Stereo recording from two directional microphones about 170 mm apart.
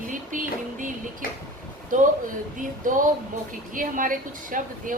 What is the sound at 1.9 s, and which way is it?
A woman's voice, 50° right (ahead or behind).